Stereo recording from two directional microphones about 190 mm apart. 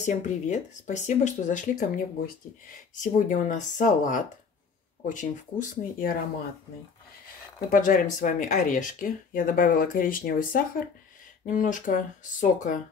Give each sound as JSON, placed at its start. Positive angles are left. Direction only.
{"t": 0.0, "sound": "speech", "side_deg": 40}
{"t": 7.7, "sound": "speech", "side_deg": 45}